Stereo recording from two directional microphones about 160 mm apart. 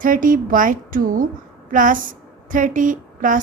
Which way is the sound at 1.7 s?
55° right (ahead or behind).